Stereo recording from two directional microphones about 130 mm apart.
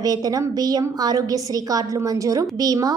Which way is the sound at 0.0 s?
30° right (ahead or behind).